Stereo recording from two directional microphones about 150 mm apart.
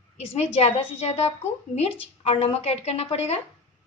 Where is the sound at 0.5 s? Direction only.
45° left (ahead or behind).